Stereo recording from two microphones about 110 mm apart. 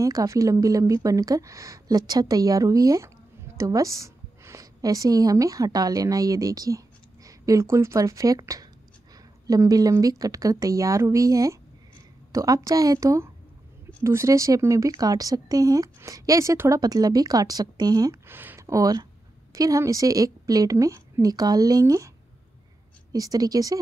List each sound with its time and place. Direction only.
0.0 s a woman's voice: 30° right (ahead or behind)
18.2 s a sound: 20° right (ahead or behind)
18.7 s speech: 35° right (ahead or behind)
23.1 s speech: 35° right (ahead or behind)